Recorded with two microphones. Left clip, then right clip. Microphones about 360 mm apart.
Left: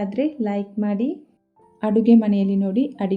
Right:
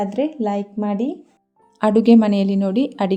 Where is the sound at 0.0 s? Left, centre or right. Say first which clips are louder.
Right 3 dB; right.